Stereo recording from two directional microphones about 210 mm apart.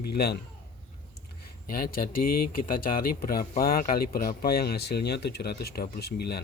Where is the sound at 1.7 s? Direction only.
45° left (ahead or behind).